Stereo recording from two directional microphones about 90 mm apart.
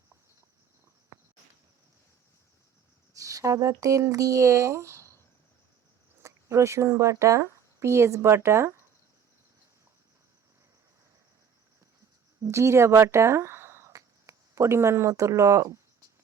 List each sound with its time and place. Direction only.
1.1 s insect: 35° right (ahead or behind)
3.1 s speech: 40° right (ahead or behind)
6.2 s speech: 35° right (ahead or behind)
12.4 s speech: 30° right (ahead or behind)